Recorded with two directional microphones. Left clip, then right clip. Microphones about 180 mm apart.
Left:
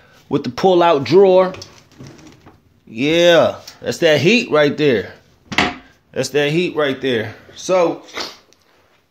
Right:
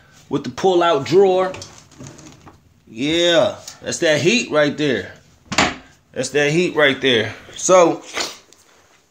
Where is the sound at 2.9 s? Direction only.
50° left (ahead or behind).